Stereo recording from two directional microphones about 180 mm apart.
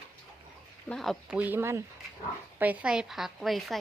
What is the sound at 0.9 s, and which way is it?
A woman's voice, centre (ahead or behind).